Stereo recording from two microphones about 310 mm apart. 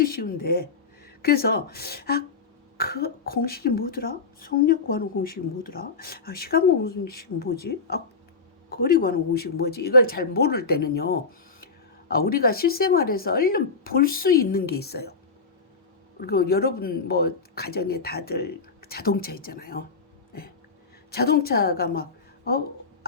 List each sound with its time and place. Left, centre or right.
0.0 s speech: left
16.2 s speech: left
21.1 s speech: left